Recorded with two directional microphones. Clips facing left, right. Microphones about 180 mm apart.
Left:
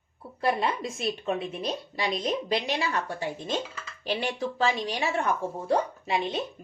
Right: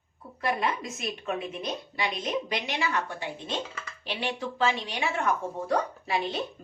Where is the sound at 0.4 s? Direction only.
30° left (ahead or behind).